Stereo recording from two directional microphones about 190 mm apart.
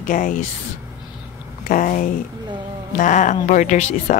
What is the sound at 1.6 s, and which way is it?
Speech, 45° left (ahead or behind).